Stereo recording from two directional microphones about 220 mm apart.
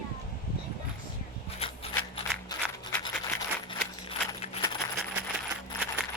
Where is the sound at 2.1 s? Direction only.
20° left (ahead or behind).